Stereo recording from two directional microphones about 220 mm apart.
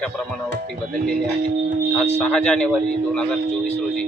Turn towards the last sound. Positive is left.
turn(degrees=5)  # may be behind; listen again after turning